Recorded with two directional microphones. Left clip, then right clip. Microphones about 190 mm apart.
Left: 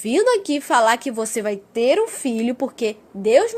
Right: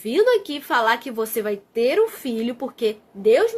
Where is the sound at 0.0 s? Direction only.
40° left (ahead or behind).